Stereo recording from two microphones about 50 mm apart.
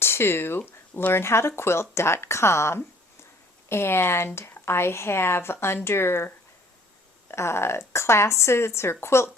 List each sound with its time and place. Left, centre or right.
0.0 s speech: left